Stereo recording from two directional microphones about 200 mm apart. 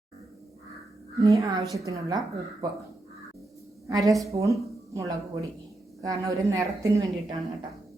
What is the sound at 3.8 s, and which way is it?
A woman's voice, 15° right (ahead or behind).